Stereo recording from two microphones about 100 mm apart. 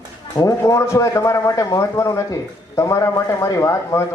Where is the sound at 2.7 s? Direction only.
30° left (ahead or behind).